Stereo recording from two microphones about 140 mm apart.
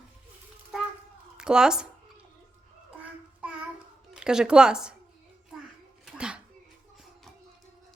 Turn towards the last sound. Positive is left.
turn(degrees=-5)  # may be behind; listen again after turning